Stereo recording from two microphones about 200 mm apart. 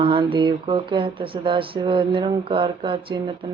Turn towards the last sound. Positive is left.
turn(degrees=-25)  # may be behind; listen again after turning